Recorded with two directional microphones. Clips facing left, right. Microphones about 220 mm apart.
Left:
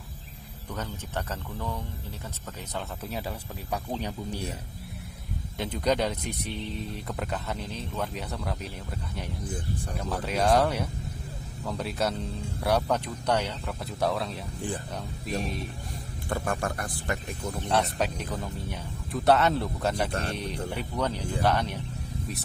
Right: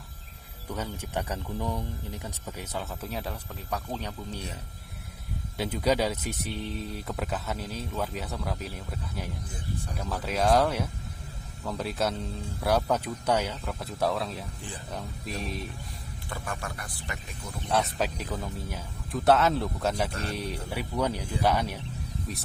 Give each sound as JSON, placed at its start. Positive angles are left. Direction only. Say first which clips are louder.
{"t": 0.7, "sound": "speech", "louder": "right 2 dB", "side_deg": -10}
{"t": 2.7, "sound": "speech", "louder": "left 1 dB", "side_deg": 0}
{"t": 5.5, "sound": "speech", "louder": "right 1 dB", "side_deg": -5}
{"t": 10.0, "sound": "speech", "louder": "left 1 dB", "side_deg": 0}
{"t": 16.3, "sound": "speech", "louder": "left 7 dB", "side_deg": 50}
{"t": 17.7, "sound": "speech", "louder": "even", "side_deg": 0}